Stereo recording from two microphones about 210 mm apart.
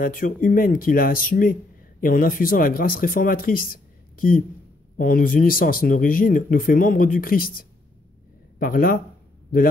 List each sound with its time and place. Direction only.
0.0 s speech: 40° left (ahead or behind)